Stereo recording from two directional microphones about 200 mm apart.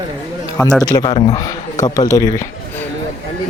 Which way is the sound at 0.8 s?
20° left (ahead or behind).